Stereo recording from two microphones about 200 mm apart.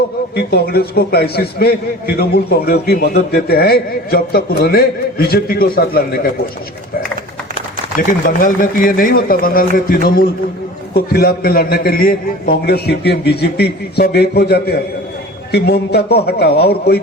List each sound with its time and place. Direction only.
0.3 s a man's voice: 50° left (ahead or behind)
8.3 s a man's voice: 40° left (ahead or behind)